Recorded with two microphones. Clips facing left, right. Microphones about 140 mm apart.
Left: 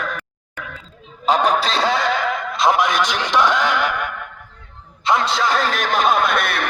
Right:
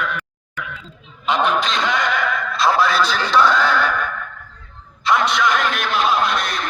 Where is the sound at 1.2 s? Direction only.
40° left (ahead or behind); by 4.2 s 15° left (ahead or behind).